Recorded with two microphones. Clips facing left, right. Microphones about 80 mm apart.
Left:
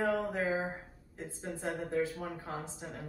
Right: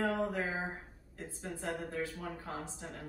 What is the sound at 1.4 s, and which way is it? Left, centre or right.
Speech, left.